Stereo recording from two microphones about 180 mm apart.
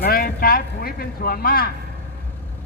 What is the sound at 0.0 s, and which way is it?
Speech, 55° left (ahead or behind).